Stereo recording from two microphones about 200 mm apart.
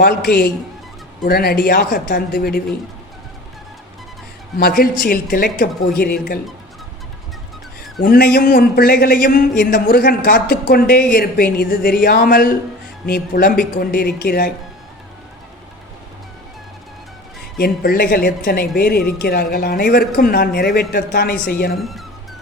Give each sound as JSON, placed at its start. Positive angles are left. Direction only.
{"t": 0.0, "sound": "speech", "side_deg": 50}
{"t": 4.8, "sound": "speech", "side_deg": 45}
{"t": 8.0, "sound": "speech", "side_deg": 50}
{"t": 17.6, "sound": "speech", "side_deg": 50}
{"t": 21.8, "sound": "speech", "side_deg": 0}